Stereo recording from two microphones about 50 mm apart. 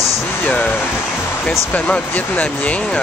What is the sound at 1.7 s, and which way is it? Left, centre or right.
Speech, left.